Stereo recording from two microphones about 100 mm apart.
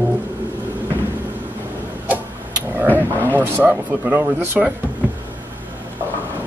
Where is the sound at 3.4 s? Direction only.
15° right (ahead or behind).